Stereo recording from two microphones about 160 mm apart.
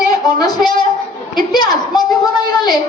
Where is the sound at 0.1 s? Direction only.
25° left (ahead or behind).